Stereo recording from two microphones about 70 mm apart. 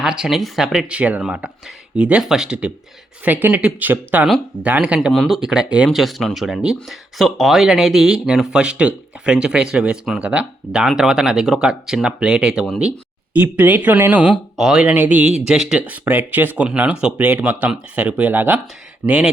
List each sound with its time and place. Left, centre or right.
0.0 s speech: centre
0.9 s speech: centre
2.2 s speech: centre
3.2 s speech: right
5.1 s speech: centre
5.9 s speech: centre
13.3 s speech: right
14.5 s speech: centre
14.8 s speech: right
15.9 s speech: right
17.2 s speech: right